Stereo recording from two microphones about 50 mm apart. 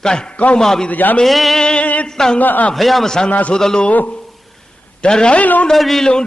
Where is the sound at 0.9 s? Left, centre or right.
Left.